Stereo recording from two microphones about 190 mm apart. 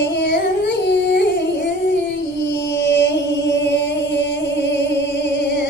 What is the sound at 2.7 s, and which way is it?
Chant, 65° left (ahead or behind).